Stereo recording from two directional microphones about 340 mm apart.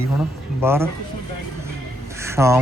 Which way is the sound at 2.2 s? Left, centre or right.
Centre.